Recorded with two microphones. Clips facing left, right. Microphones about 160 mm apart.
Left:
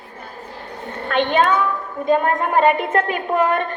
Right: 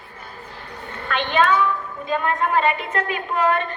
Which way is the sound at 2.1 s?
50° left (ahead or behind).